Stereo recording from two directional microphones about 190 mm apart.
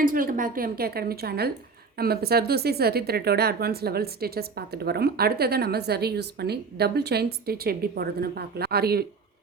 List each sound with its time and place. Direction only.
0.0 s a woman's voice: 45° right (ahead or behind)